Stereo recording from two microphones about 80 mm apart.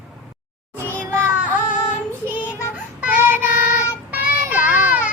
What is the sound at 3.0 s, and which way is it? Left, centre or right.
Child singing, right.